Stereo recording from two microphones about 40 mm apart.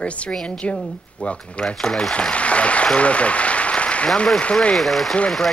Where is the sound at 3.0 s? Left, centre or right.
Left.